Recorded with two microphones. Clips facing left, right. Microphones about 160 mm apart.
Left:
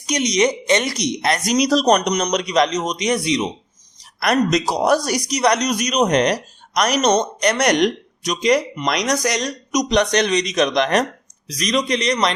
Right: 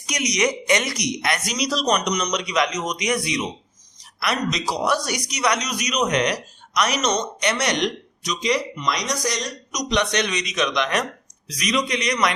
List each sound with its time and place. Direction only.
0.0 s speech: 25° left (ahead or behind)
4.2 s speech: 45° left (ahead or behind)
5.6 s speech: 50° left (ahead or behind)
5.9 s speech: 35° left (ahead or behind); by 9.0 s 60° left (ahead or behind)
9.7 s speech: 40° left (ahead or behind)